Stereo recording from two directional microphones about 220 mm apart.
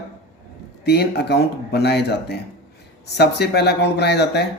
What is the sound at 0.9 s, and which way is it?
Speech, 50° left (ahead or behind).